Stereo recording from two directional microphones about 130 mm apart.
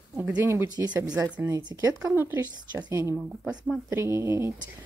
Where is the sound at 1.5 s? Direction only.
30° right (ahead or behind).